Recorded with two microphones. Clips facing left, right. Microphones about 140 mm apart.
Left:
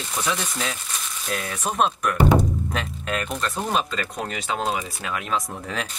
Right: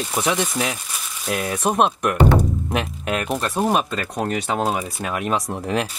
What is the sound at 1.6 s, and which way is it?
Speech, 60° right (ahead or behind).